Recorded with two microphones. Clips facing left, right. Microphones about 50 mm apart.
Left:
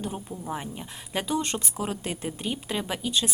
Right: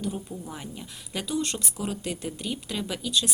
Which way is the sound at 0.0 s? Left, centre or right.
Left.